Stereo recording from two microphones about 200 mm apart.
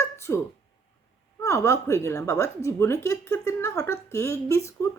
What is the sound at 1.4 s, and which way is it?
A woman's voice, 15° left (ahead or behind).